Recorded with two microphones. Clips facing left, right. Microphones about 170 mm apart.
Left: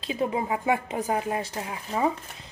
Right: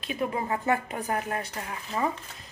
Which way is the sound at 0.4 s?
15° left (ahead or behind).